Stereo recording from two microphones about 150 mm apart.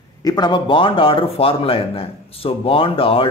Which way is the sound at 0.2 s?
25° left (ahead or behind).